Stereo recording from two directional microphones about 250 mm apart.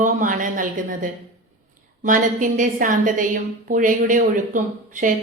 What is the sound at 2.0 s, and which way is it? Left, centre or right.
A woman's voice, right.